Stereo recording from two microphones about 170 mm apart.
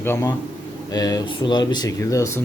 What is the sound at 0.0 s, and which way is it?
A man's voice, 15° left (ahead or behind).